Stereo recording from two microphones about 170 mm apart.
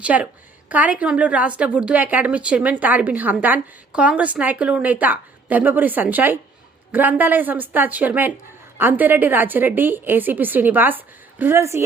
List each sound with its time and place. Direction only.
0.0 s a woman's voice: 10° right (ahead or behind)